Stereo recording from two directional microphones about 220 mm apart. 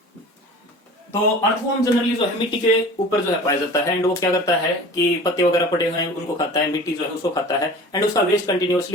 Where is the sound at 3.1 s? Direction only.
15° left (ahead or behind).